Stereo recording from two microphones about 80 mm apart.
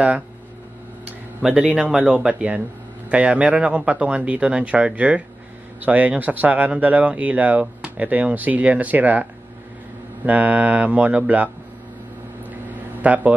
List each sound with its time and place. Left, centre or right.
1.4 s speech: centre
2.1 s speech: centre
13.0 s a man's voice: right